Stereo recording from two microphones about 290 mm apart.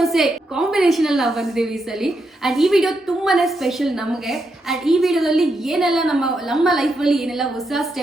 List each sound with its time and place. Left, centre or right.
0.0 s a woman's voice: centre